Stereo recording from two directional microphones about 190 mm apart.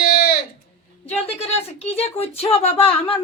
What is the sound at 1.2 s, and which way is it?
A woman's voice, 30° left (ahead or behind).